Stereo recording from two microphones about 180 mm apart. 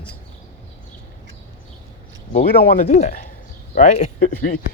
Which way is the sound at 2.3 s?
40° left (ahead or behind).